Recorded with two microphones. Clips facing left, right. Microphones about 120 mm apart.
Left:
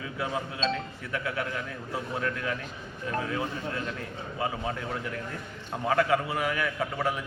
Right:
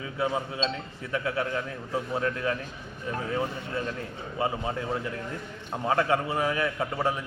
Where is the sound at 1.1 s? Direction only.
25° right (ahead or behind).